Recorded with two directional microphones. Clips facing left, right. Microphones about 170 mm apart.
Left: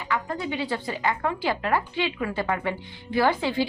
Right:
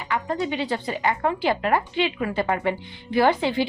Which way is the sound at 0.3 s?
25° right (ahead or behind).